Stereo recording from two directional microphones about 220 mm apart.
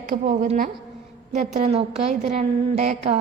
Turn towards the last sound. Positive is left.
turn(degrees=-30)  # may be behind; listen again after turning